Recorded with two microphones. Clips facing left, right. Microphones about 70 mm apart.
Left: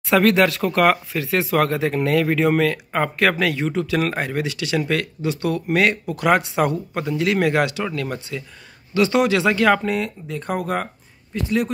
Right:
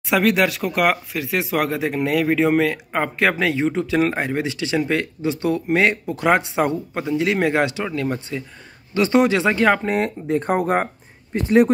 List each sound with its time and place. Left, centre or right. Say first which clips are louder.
0.0 s speech: left 2 dB; centre
8.9 s speech: right 1 dB; right
9.8 s speech: right 3 dB; right